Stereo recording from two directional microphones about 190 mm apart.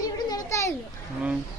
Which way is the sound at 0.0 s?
20° left (ahead or behind).